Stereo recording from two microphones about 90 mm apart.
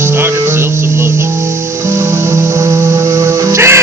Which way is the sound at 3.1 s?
35° right (ahead or behind).